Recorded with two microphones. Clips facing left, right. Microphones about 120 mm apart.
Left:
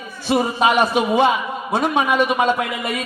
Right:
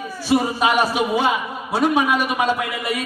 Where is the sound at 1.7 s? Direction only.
20° left (ahead or behind).